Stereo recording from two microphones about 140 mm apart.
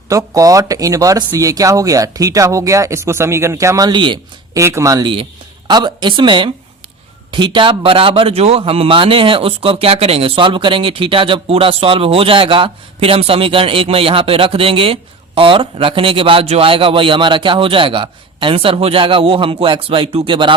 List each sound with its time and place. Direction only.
0.1 s speech: 25° right (ahead or behind)
4.5 s a man's voice: 20° right (ahead or behind); by 20.5 s 35° right (ahead or behind)